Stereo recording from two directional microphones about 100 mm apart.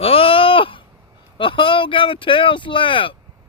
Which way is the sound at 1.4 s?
55° left (ahead or behind).